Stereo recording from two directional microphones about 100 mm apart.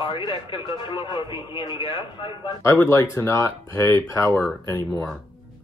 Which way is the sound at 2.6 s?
30° left (ahead or behind).